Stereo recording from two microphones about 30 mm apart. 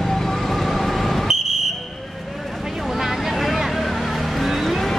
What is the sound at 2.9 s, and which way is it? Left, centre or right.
Vehicle, centre.